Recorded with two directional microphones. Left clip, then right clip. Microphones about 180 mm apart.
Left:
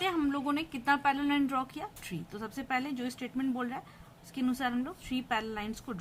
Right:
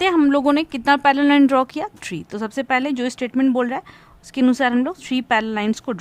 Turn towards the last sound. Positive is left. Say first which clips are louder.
# right 15 dB
turn(degrees=-55)  # may be behind; listen again after turning